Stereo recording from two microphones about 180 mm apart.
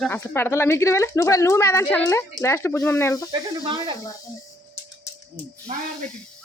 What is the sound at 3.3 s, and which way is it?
Speech, 20° right (ahead or behind).